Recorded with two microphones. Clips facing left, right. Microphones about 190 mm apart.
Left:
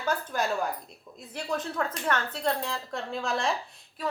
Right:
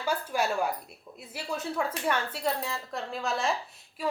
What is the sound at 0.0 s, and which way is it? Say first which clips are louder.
A woman's voice: even; 10° right (ahead or behind).